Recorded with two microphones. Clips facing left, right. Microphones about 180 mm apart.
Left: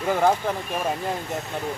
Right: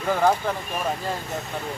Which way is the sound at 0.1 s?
10° left (ahead or behind).